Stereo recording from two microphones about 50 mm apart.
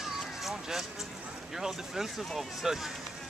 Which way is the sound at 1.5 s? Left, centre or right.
Centre.